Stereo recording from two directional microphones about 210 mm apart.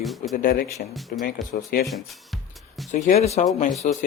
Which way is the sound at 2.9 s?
35° left (ahead or behind).